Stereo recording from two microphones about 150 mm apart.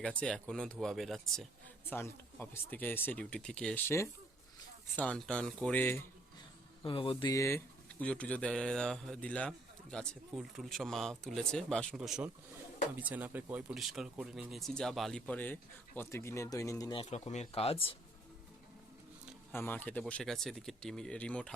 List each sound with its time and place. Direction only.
0.2 s speech: 5° left (ahead or behind)
1.9 s speech: 15° left (ahead or behind)
4.9 s speech: 5° left (ahead or behind)
6.8 s speech: 35° left (ahead or behind)
7.3 s speech: 15° left (ahead or behind)
17.1 s speech: 50° left (ahead or behind)
19.5 s speech: 15° left (ahead or behind)